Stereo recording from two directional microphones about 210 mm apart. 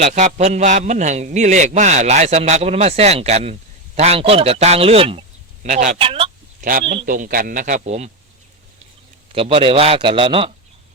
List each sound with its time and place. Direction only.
0.0 s a man's voice: 35° right (ahead or behind)
6.6 s a man's voice: 40° right (ahead or behind)
9.3 s a man's voice: 25° right (ahead or behind)